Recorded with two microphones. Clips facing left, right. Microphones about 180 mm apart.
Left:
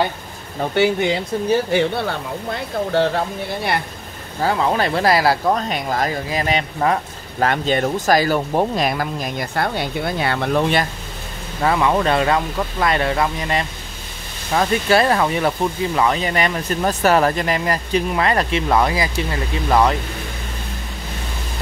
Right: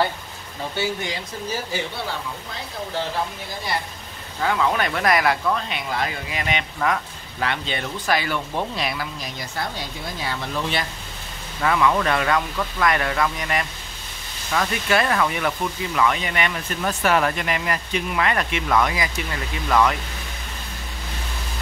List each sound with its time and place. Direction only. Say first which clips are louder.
0.6 s speech: left 9 dB; 60° left (ahead or behind)
4.4 s speech: left 3 dB; 35° left (ahead or behind); by 10.9 s 55° left (ahead or behind)
11.6 s speech: left 3 dB; 30° left (ahead or behind)